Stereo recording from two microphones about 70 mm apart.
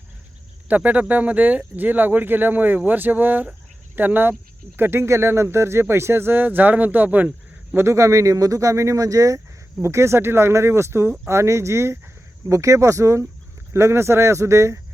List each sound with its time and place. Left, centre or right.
0.7 s speech: right
7.8 s speech: right
9.8 s speech: right